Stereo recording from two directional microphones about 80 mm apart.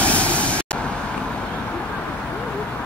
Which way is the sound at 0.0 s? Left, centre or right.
Centre.